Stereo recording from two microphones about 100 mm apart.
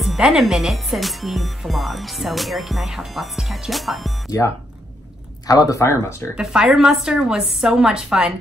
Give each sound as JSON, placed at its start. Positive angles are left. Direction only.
{"t": 0.0, "sound": "speech", "side_deg": -5}
{"t": 5.5, "sound": "speech", "side_deg": 35}
{"t": 6.3, "sound": "a woman's voice", "side_deg": -5}